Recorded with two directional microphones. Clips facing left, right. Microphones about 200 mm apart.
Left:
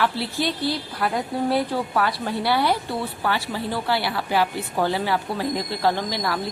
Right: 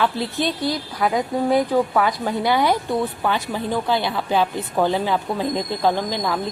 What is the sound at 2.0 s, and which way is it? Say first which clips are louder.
A woman's voice: right 3 dB; 15° right (ahead or behind).